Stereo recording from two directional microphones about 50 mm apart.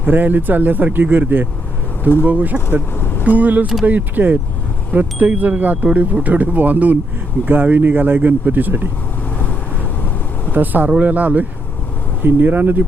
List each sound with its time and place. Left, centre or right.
0.0 s speech: right
10.5 s speech: right